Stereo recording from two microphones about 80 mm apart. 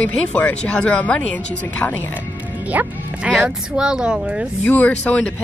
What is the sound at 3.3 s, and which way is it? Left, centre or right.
Speech, centre.